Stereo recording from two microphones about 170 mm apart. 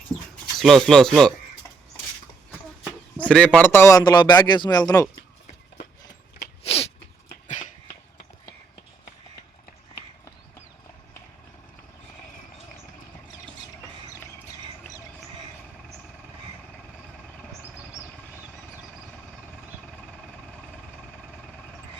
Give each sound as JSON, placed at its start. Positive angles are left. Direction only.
{"t": 0.5, "sound": "speech", "side_deg": 0}
{"t": 3.2, "sound": "a man's voice", "side_deg": 5}
{"t": 6.6, "sound": "sneeze", "side_deg": 35}
{"t": 7.4, "sound": "cough", "side_deg": 45}